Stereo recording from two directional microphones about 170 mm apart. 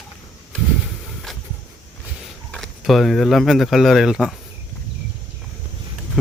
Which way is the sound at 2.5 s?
Centre (ahead or behind).